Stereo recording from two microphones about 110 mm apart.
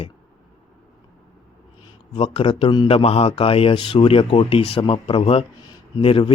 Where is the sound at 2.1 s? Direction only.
60° left (ahead or behind).